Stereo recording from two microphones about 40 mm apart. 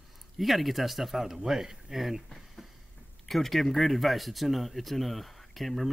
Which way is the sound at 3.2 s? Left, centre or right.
Centre.